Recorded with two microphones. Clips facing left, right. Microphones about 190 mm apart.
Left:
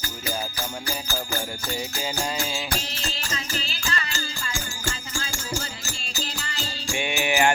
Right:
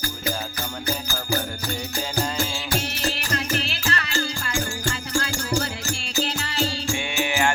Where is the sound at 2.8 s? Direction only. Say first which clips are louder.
Right 6 dB; 70° right (ahead or behind).